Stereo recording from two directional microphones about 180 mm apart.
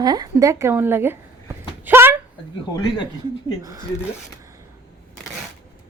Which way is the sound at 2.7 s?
20° left (ahead or behind).